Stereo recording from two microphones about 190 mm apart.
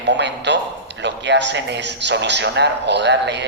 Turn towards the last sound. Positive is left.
turn(degrees=-65)  # may be behind; listen again after turning